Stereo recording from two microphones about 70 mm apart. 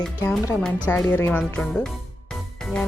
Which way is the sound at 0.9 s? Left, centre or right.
Left.